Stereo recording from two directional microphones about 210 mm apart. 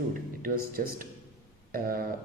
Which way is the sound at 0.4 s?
45° right (ahead or behind).